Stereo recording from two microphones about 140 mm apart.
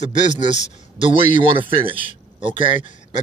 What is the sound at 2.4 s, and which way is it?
Speech, 35° right (ahead or behind).